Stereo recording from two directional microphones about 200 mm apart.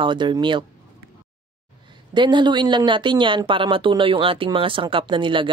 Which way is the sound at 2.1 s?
25° right (ahead or behind).